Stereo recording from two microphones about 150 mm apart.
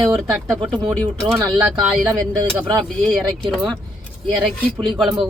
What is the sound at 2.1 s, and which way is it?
Speech, 25° right (ahead or behind).